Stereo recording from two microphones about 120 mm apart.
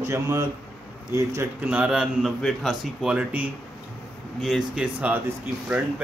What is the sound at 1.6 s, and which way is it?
Speech, 10° right (ahead or behind).